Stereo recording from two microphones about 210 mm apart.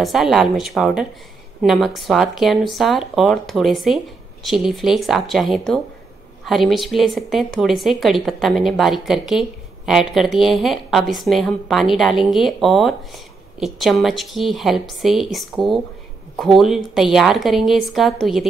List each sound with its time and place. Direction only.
0.0 s a woman's voice: centre (ahead or behind)